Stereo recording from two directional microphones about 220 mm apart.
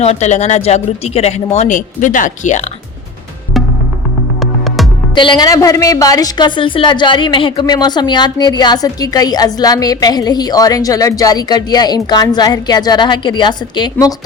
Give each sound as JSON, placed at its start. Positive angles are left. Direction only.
{"t": 0.0, "sound": "speech", "side_deg": 30}
{"t": 5.1, "sound": "a woman's voice", "side_deg": 20}